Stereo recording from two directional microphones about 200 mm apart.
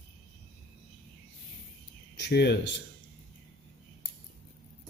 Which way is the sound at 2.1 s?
55° left (ahead or behind).